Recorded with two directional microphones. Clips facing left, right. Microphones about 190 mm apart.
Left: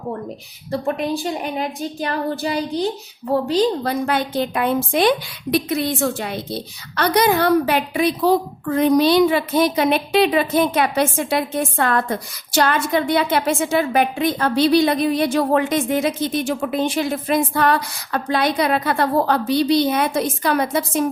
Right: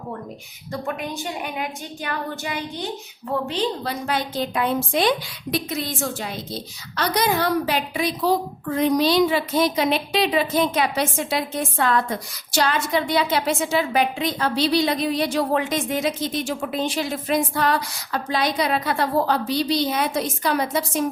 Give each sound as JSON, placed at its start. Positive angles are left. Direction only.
{"t": 0.7, "sound": "a woman's voice", "side_deg": 35}
{"t": 4.0, "sound": "a woman's voice", "side_deg": 55}